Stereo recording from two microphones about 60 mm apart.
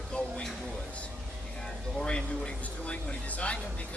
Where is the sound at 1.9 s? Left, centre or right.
Centre.